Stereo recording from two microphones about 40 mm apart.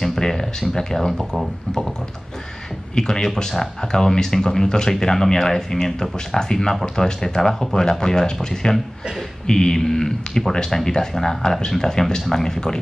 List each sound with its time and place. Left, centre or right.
0.0 s speech: centre
3.0 s speech: centre